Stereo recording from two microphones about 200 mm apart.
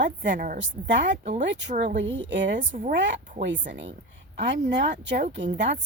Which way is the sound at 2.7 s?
40° right (ahead or behind).